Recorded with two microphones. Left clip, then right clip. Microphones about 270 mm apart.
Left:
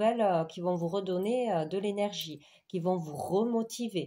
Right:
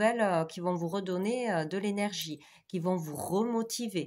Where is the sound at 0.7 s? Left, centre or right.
Right.